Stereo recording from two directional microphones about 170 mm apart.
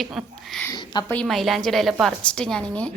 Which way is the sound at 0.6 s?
25° left (ahead or behind).